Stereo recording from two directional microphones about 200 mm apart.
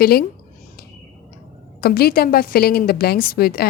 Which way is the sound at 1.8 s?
50° left (ahead or behind).